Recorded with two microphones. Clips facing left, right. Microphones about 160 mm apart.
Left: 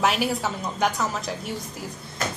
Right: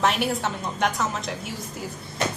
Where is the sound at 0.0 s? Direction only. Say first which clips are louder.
Even; centre (ahead or behind).